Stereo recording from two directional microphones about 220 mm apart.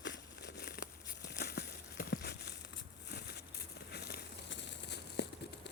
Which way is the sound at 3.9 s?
45° left (ahead or behind).